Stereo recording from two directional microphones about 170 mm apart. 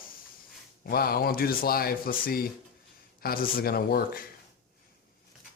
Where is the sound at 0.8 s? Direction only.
60° left (ahead or behind).